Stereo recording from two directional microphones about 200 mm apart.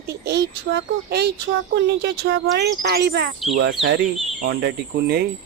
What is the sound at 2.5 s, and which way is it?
Speech, 55° right (ahead or behind).